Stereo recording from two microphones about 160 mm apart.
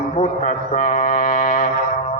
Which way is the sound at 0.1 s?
50° left (ahead or behind).